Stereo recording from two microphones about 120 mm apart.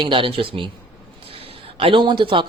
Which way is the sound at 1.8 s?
45° right (ahead or behind).